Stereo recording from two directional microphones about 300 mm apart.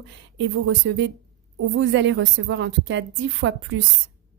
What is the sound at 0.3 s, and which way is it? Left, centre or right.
A woman's voice, right.